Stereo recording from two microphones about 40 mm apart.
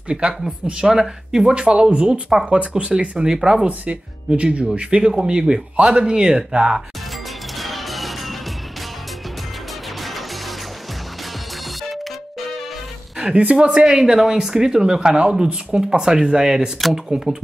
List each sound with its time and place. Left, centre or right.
0.1 s speech: right
1.5 s speech: right
3.6 s speech: right
7.5 s music: centre
13.3 s speech: right
13.8 s speech: centre